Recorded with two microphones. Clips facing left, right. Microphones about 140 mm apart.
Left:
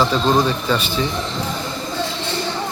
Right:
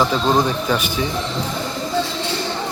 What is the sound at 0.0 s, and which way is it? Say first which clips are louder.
Speech: even; 10° right (ahead or behind).